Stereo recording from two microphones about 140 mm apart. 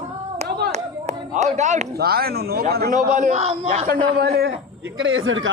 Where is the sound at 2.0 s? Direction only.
90° right; by 3.7 s 45° right (ahead or behind).